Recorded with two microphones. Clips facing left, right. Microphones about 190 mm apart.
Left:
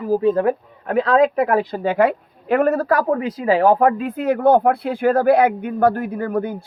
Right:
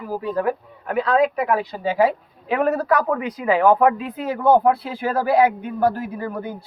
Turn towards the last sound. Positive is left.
turn(degrees=55)  # may be behind; listen again after turning